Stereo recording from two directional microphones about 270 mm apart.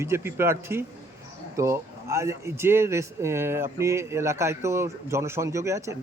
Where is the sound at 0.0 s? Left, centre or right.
Centre.